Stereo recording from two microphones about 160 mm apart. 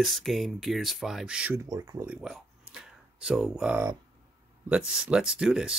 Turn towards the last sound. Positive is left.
turn(degrees=-5)  # may be behind; listen again after turning